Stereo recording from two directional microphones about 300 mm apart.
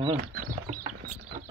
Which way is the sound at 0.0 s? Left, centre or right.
Right.